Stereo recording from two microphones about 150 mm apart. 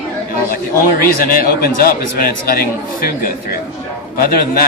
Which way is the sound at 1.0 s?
75° left (ahead or behind).